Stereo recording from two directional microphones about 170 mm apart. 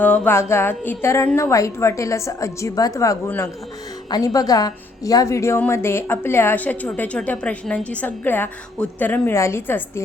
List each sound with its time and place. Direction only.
0.0 s a woman's voice: 10° left (ahead or behind)